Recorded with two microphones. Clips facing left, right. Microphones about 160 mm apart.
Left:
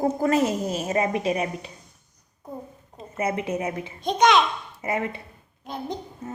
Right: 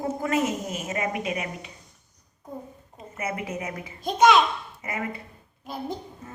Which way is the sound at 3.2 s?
30° left (ahead or behind).